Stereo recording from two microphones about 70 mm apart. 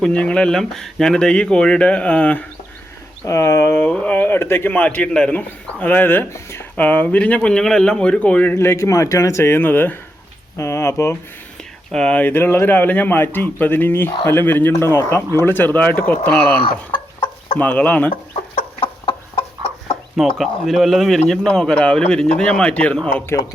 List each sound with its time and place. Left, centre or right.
0.0 s speech: centre
3.2 s a man's voice: left
3.7 s a man's voice: left
6.3 s speech: left
6.7 s speech: left
8.5 s a man's voice: left
9.4 s a man's voice: left
10.6 s a man's voice: left
11.9 s speech: centre
12.2 s a man's voice: left
16.3 s a man's voice: centre
17.6 s a man's voice: left
20.2 s speech: centre
21.4 s speech: centre